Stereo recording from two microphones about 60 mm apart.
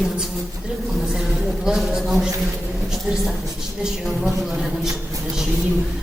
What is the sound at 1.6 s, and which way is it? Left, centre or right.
Speech, centre.